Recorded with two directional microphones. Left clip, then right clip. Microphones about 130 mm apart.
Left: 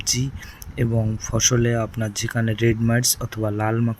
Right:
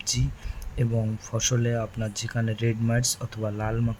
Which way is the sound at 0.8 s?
30° left (ahead or behind).